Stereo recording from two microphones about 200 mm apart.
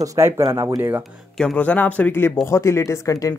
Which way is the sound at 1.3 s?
5° left (ahead or behind).